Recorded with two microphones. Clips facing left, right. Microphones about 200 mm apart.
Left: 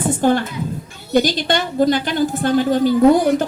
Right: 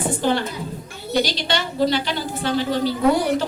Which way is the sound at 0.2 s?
50° left (ahead or behind).